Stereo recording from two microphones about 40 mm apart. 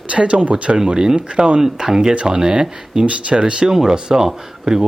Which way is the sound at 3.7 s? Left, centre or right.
Centre.